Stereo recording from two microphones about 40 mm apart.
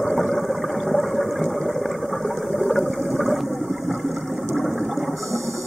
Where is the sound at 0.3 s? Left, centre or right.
Centre.